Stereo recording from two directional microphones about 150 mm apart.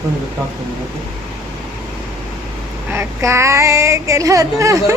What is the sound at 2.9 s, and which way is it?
Child singing, 20° right (ahead or behind).